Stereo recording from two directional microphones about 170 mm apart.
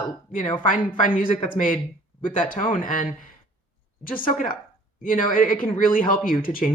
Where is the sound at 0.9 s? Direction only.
55° left (ahead or behind).